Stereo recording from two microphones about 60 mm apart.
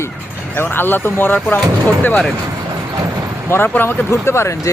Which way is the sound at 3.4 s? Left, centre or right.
Left.